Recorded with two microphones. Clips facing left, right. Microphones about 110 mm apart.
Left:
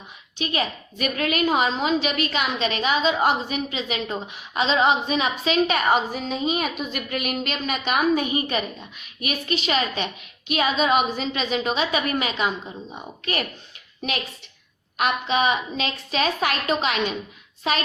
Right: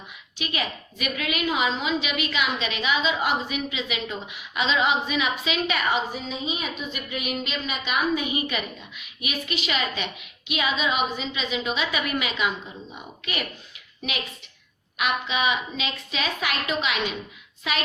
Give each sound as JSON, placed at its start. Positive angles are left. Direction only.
{"t": 0.3, "sound": "a woman's voice", "side_deg": 35}
{"t": 14.9, "sound": "a woman's voice", "side_deg": 40}